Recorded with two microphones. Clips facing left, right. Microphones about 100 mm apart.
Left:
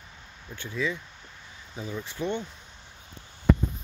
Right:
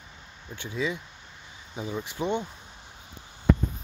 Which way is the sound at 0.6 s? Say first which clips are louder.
Even; 20° right (ahead or behind).